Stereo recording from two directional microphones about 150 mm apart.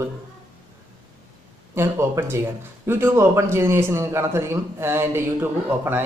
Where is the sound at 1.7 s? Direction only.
20° right (ahead or behind).